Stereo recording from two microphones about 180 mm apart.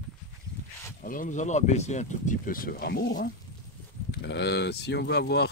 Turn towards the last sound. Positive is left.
turn(degrees=65)  # may be behind; listen again after turning